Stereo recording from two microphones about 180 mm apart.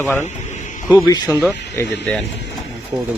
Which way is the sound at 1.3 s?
5° right (ahead or behind).